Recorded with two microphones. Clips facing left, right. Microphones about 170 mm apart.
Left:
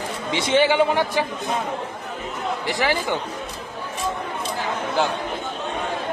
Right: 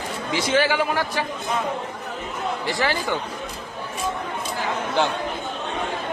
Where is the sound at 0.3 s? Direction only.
25° left (ahead or behind).